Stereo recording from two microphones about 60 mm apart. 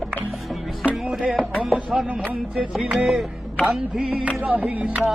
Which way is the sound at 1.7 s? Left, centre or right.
Centre.